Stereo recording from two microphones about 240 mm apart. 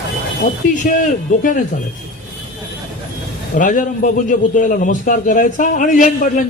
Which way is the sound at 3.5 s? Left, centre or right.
Left.